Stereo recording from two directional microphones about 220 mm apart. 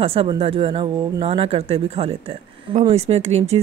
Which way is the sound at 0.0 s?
25° right (ahead or behind).